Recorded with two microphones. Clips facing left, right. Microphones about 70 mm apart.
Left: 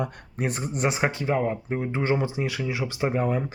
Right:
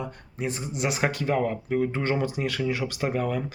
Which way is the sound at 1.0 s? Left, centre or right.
Centre.